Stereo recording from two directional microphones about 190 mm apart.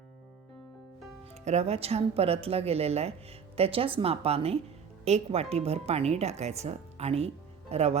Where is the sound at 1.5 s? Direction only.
35° right (ahead or behind).